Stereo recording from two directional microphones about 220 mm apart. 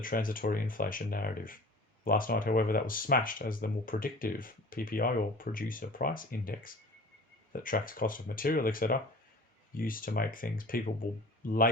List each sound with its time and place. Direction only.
0.0 s speech: 40° left (ahead or behind)